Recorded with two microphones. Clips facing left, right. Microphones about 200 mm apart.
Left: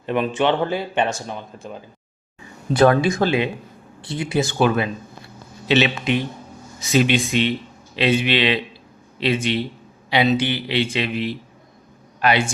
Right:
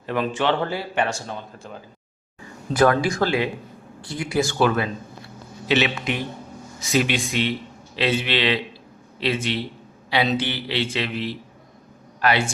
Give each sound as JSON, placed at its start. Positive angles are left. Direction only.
{"t": 0.0, "sound": "speech", "side_deg": 20}